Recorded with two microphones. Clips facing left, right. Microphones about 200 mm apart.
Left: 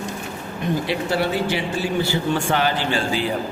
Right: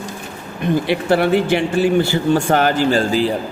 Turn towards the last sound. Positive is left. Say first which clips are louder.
# right 7 dB
turn(degrees=-40)  # may be behind; listen again after turning